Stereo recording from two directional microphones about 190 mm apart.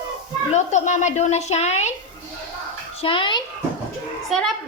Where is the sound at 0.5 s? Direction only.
40° left (ahead or behind).